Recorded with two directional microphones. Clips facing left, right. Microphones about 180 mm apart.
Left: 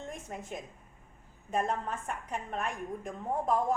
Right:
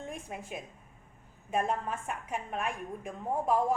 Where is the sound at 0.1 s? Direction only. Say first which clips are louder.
Even; 10° right (ahead or behind).